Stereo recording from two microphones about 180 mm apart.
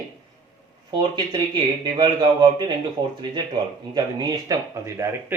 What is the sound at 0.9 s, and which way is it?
Speech, 25° right (ahead or behind).